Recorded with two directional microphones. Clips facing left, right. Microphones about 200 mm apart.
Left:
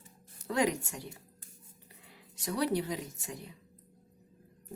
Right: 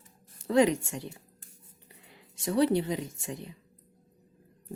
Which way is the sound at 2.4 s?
25° right (ahead or behind).